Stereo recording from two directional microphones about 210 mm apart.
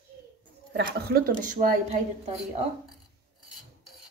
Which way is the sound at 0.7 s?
50° right (ahead or behind).